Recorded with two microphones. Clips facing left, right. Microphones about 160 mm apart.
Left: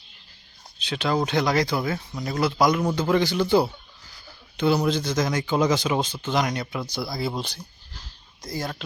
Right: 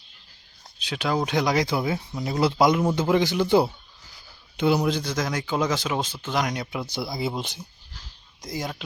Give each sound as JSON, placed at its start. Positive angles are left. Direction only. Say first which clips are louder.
{"t": 0.9, "sound": "speech", "louder": "left 1 dB", "side_deg": -10}
{"t": 2.4, "sound": "speech", "louder": "right 1 dB", "side_deg": -25}
{"t": 6.9, "sound": "speech", "louder": "even", "side_deg": -20}
{"t": 8.4, "sound": "speech", "louder": "left 1 dB", "side_deg": -15}